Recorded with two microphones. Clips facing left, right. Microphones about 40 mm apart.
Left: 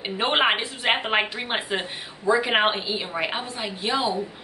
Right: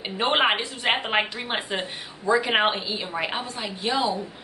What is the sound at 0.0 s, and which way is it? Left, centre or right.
A woman's voice, centre.